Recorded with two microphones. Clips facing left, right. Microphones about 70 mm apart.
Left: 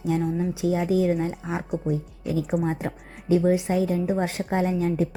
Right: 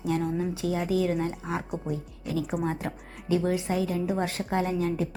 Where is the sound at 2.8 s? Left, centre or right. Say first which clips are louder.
Left 4 dB; left.